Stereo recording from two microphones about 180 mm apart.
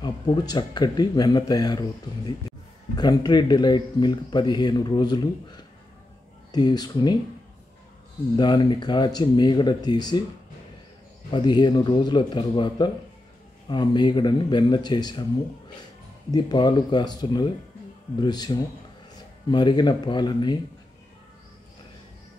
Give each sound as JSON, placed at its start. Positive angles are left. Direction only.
{"t": 0.0, "sound": "speech", "side_deg": 25}
{"t": 8.4, "sound": "speech", "side_deg": 25}
{"t": 11.3, "sound": "speech", "side_deg": 25}
{"t": 16.3, "sound": "speech", "side_deg": 25}